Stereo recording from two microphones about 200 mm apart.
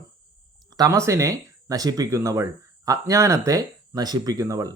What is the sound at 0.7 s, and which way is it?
Speech, 15° right (ahead or behind).